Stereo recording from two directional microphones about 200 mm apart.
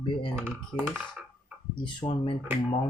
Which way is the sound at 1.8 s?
25° left (ahead or behind).